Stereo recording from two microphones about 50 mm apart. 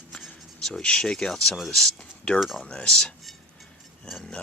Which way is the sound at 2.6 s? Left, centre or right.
Centre.